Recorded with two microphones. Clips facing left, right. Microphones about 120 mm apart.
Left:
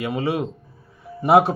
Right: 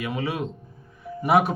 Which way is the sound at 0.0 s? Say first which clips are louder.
Left 4 dB; 30° left (ahead or behind).